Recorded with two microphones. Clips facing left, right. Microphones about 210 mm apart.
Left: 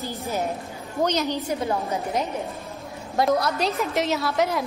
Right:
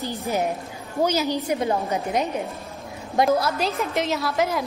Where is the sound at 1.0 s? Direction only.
10° right (ahead or behind).